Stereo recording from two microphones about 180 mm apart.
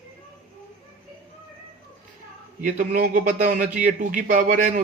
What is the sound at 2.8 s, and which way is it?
Speech, 50° right (ahead or behind).